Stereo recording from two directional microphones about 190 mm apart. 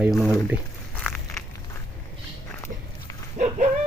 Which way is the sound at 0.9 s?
5° left (ahead or behind).